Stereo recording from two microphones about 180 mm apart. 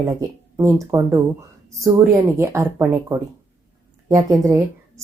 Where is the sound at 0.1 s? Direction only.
20° right (ahead or behind).